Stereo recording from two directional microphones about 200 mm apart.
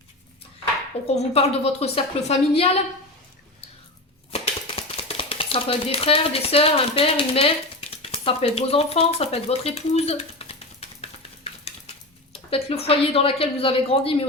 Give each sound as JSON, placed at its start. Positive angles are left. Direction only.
{"t": 1.0, "sound": "a woman's voice", "side_deg": 30}
{"t": 4.3, "sound": "typewriter", "side_deg": 30}
{"t": 12.5, "sound": "speech", "side_deg": 30}